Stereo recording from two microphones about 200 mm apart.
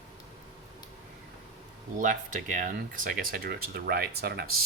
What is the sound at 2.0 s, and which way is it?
Speech, 40° right (ahead or behind).